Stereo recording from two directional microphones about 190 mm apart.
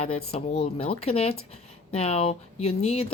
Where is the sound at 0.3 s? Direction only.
35° left (ahead or behind).